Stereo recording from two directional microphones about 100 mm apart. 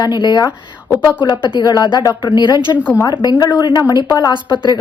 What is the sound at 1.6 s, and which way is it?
A woman's voice, 40° left (ahead or behind).